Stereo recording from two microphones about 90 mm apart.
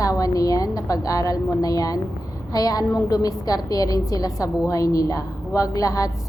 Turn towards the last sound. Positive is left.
turn(degrees=40)  # may be behind; listen again after turning